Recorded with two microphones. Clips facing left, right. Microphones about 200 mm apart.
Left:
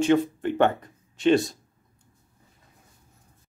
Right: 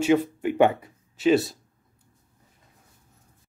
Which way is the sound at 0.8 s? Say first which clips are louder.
Even; 5° right (ahead or behind).